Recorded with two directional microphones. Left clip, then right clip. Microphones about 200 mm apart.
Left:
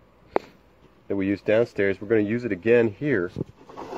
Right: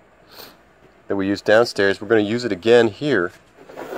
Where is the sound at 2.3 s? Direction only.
75° right (ahead or behind).